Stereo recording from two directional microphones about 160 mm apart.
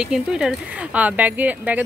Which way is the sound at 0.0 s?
5° right (ahead or behind).